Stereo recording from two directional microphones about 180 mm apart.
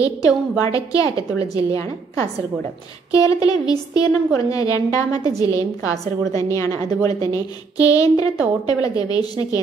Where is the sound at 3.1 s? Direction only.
20° left (ahead or behind).